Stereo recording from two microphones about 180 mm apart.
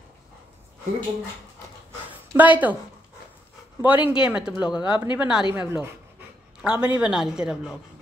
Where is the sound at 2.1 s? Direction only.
10° right (ahead or behind).